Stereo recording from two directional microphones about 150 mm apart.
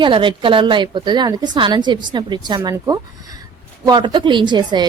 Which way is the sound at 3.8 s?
30° right (ahead or behind).